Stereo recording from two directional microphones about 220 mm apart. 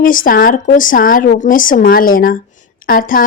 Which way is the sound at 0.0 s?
40° left (ahead or behind).